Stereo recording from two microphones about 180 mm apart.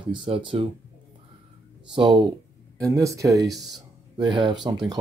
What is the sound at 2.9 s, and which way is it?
Speech, 15° right (ahead or behind).